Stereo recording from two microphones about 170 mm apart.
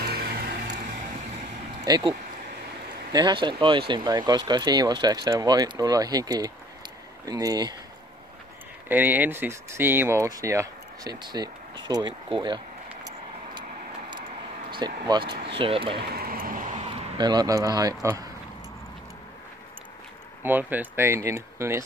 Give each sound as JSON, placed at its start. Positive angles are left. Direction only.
{"t": 0.0, "sound": "vehicle", "side_deg": -70}
{"t": 1.9, "sound": "speech", "side_deg": -25}
{"t": 8.8, "sound": "speech", "side_deg": -10}
{"t": 14.7, "sound": "speech", "side_deg": -25}
{"t": 16.1, "sound": "a sound", "side_deg": -60}
{"t": 17.2, "sound": "speech", "side_deg": -25}
{"t": 20.4, "sound": "speech", "side_deg": -10}